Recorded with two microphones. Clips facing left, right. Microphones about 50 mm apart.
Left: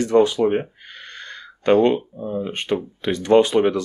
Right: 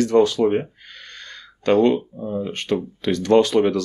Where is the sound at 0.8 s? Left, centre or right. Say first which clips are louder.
Left 2 dB; left.